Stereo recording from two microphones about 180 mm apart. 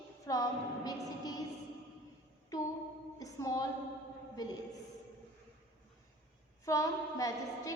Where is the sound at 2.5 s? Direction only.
20° left (ahead or behind).